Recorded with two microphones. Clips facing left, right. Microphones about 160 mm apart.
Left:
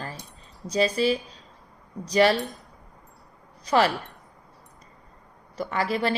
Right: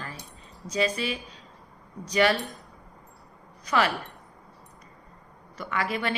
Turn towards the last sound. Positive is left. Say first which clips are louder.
# left 3 dB
turn(degrees=35)  # may be behind; listen again after turning